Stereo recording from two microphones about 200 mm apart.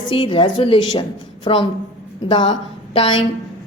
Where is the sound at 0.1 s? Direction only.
25° left (ahead or behind).